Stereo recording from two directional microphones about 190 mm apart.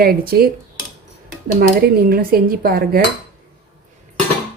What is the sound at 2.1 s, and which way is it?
Speech, 50° right (ahead or behind).